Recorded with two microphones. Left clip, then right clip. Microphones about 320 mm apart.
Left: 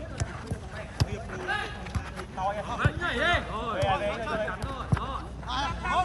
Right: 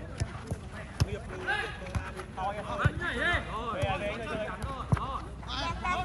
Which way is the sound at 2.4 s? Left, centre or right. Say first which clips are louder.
Left 3 dB; left.